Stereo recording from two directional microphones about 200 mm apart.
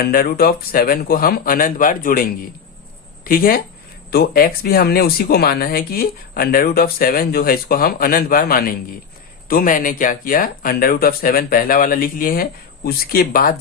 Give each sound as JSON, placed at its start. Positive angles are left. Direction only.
{"t": 0.0, "sound": "speech", "side_deg": 50}